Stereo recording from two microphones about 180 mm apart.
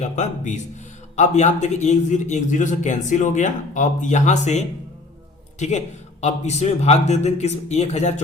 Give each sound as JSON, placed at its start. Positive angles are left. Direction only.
{"t": 0.0, "sound": "a man's voice", "side_deg": 40}